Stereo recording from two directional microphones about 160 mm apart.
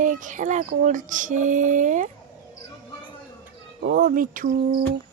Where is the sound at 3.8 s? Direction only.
65° right (ahead or behind).